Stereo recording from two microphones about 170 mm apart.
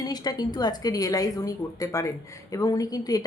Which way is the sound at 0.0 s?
25° left (ahead or behind).